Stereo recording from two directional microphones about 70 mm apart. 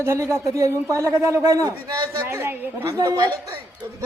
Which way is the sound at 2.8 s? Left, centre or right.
Right.